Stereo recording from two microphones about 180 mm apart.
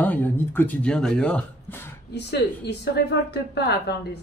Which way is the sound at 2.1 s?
70° left (ahead or behind).